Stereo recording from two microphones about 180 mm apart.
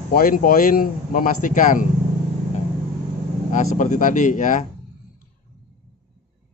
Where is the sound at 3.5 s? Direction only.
45° left (ahead or behind).